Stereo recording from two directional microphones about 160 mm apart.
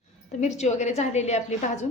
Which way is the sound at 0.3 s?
50° left (ahead or behind).